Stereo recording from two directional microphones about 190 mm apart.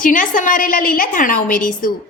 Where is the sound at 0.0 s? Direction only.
45° left (ahead or behind).